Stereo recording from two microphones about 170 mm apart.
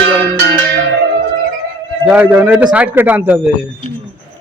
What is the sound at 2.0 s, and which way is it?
A man's voice, 10° right (ahead or behind).